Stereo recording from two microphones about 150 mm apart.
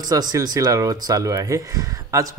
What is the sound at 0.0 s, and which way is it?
Speech, 25° right (ahead or behind).